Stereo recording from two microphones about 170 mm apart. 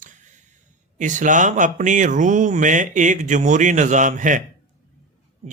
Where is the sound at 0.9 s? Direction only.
50° right (ahead or behind).